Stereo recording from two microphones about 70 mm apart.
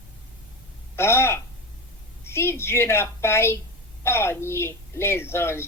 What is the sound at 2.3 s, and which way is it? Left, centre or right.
A woman's voice, left.